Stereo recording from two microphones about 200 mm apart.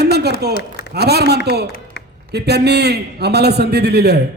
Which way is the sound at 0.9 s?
55° right (ahead or behind).